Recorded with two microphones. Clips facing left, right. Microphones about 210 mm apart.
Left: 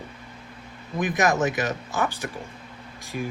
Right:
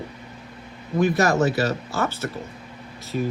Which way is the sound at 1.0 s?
15° left (ahead or behind).